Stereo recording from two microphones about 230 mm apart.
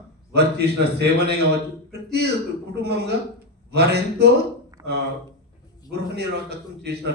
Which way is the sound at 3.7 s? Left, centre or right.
Right.